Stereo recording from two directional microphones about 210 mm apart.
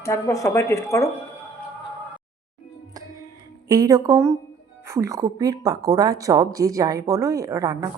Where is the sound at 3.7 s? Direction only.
15° right (ahead or behind).